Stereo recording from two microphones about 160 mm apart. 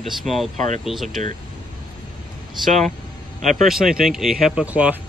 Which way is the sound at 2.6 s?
Centre (ahead or behind).